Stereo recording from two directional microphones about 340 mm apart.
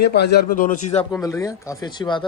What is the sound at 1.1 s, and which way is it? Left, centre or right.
Speech, centre.